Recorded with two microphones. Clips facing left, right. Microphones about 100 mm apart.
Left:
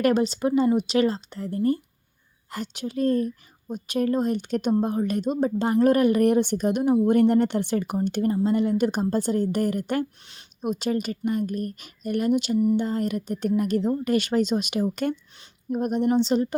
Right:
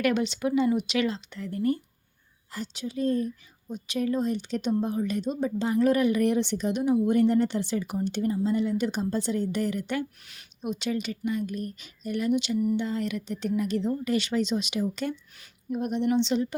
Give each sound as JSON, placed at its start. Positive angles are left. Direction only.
{"t": 0.0, "sound": "speech", "side_deg": 35}
{"t": 2.5, "sound": "a woman's voice", "side_deg": 60}